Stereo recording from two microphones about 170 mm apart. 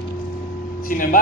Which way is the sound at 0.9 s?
55° left (ahead or behind).